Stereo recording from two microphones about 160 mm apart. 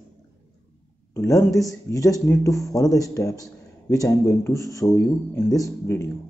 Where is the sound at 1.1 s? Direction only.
20° left (ahead or behind).